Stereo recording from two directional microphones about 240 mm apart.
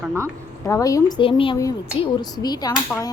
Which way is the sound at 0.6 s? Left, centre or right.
Centre.